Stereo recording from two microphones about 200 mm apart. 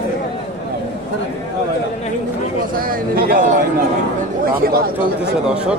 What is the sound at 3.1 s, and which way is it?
Speech, 45° right (ahead or behind).